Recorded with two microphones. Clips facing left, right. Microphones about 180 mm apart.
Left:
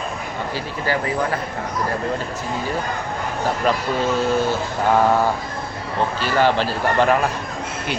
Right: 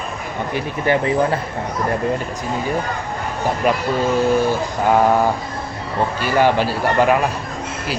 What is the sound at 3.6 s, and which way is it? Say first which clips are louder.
Speech: right 2 dB; 10° right (ahead or behind).